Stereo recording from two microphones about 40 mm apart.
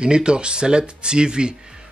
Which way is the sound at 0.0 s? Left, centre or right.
Right.